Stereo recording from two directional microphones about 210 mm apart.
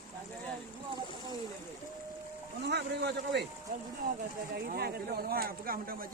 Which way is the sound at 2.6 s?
50° right (ahead or behind).